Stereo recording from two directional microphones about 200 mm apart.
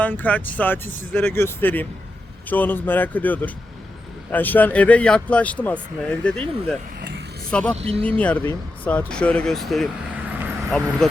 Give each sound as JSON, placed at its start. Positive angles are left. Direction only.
{"t": 0.0, "sound": "speech", "side_deg": 10}
{"t": 7.5, "sound": "speech", "side_deg": 5}
{"t": 7.8, "sound": "speech", "side_deg": -30}
{"t": 8.0, "sound": "speech", "side_deg": 5}